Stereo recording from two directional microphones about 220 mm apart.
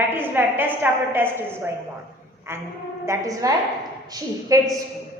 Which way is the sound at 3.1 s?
15° right (ahead or behind).